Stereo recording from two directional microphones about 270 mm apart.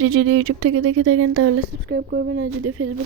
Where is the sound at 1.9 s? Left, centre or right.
Right.